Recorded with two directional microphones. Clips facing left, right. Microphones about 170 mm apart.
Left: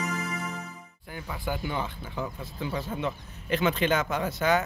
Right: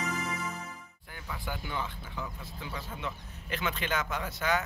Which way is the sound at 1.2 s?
15° left (ahead or behind).